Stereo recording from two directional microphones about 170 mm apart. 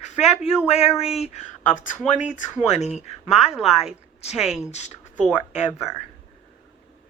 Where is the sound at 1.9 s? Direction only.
Centre (ahead or behind).